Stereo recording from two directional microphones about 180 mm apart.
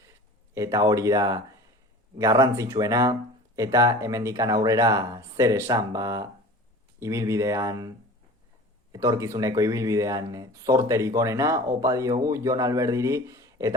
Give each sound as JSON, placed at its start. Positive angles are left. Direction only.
{"t": 0.5, "sound": "speech", "side_deg": -15}
{"t": 8.9, "sound": "speech", "side_deg": -20}